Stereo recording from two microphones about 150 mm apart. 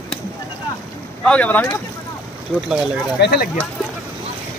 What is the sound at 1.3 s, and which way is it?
Speech, 10° left (ahead or behind).